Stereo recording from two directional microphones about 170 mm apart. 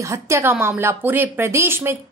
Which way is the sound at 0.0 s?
15° right (ahead or behind).